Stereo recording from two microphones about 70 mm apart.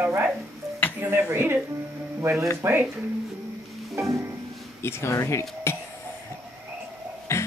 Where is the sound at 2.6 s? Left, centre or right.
Right.